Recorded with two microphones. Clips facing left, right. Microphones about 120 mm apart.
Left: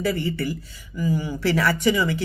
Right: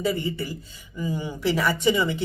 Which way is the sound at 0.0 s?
20° right (ahead or behind).